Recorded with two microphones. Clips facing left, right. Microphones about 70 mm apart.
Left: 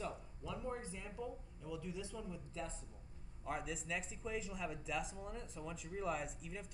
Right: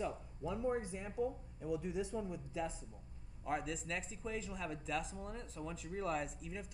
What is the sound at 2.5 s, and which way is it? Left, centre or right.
Speech, centre.